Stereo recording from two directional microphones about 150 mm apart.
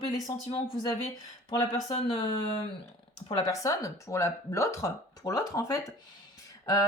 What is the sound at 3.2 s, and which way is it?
Speech, 25° left (ahead or behind).